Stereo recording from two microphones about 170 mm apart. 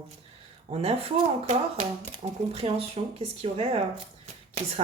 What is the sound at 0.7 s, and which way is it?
Speech, 35° right (ahead or behind).